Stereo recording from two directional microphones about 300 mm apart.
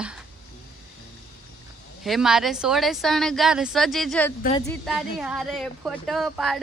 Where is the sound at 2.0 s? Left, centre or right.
Centre.